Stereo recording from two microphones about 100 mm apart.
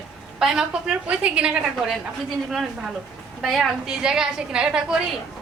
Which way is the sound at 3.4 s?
5° right (ahead or behind).